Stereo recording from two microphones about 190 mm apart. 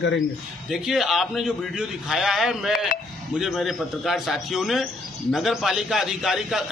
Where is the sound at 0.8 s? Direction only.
Centre (ahead or behind).